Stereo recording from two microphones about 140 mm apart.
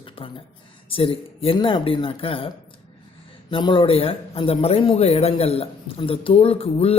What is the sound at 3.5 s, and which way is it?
A man's voice, 35° left (ahead or behind).